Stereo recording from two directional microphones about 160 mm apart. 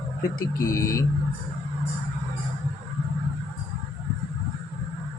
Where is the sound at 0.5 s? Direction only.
20° left (ahead or behind).